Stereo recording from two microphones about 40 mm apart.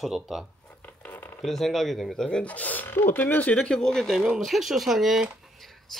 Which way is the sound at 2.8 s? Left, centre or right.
Left.